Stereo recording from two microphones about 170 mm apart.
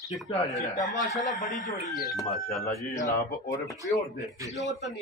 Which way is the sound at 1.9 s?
Centre (ahead or behind).